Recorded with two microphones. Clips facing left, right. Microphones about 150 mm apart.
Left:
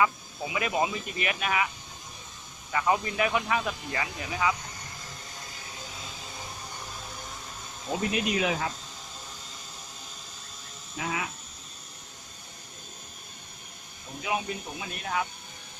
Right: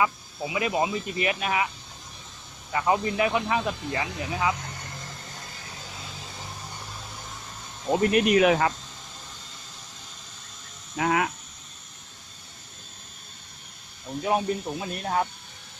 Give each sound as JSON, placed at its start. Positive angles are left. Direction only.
{"t": 0.0, "sound": "speech", "side_deg": -20}
{"t": 2.7, "sound": "speech", "side_deg": -25}
{"t": 8.1, "sound": "speech", "side_deg": -60}
{"t": 10.9, "sound": "speech", "side_deg": -65}
{"t": 14.2, "sound": "speech", "side_deg": -40}